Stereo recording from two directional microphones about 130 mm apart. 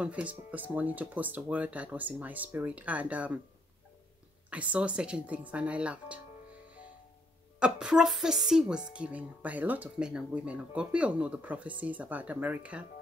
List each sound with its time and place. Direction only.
0.0 s a woman's voice: 10° right (ahead or behind)
4.5 s a woman's voice: 10° right (ahead or behind)
7.5 s a woman's voice: 5° right (ahead or behind)